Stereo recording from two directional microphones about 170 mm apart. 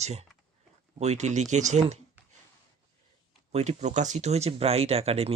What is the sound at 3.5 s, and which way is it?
Speech, 40° right (ahead or behind).